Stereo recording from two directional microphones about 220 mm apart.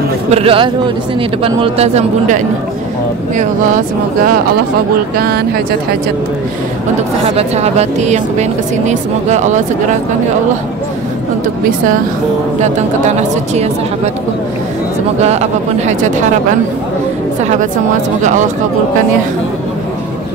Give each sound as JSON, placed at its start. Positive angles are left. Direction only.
{"t": 0.3, "sound": "speech", "side_deg": -25}
{"t": 7.2, "sound": "speech", "side_deg": -30}
{"t": 12.6, "sound": "speech", "side_deg": -30}
{"t": 15.2, "sound": "speech", "side_deg": -30}
{"t": 18.2, "sound": "speech", "side_deg": -35}